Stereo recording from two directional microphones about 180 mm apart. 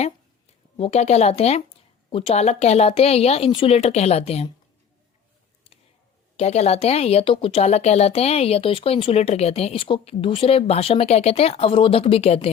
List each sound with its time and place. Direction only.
0.8 s speech: 35° left (ahead or behind)
6.3 s speech: 35° left (ahead or behind)